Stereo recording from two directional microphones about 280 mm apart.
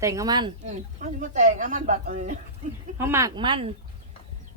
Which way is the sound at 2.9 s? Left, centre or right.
Centre.